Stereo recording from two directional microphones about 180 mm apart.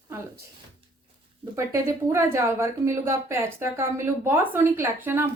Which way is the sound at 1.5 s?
15° right (ahead or behind).